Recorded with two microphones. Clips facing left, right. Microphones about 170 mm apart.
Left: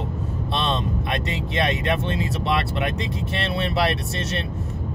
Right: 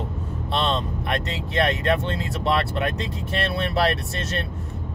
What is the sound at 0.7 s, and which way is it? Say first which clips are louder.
Speech: even; 20° left (ahead or behind).